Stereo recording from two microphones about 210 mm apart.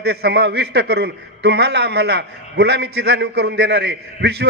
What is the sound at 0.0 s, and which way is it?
A man's voice, 50° right (ahead or behind).